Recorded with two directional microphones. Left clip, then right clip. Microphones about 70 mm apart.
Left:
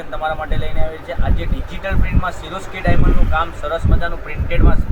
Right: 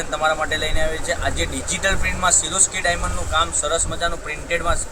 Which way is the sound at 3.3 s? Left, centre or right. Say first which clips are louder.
Right 1 dB; right.